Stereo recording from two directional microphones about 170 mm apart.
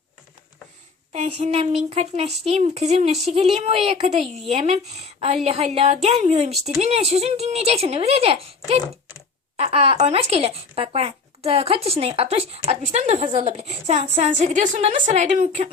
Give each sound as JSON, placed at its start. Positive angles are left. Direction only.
{"t": 1.1, "sound": "speech", "side_deg": -40}